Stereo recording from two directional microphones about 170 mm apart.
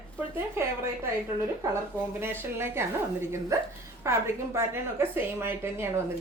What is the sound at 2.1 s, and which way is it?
A woman's voice, 15° right (ahead or behind).